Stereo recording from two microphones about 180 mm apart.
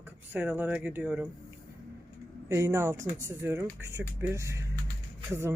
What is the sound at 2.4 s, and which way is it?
Speech, 15° right (ahead or behind).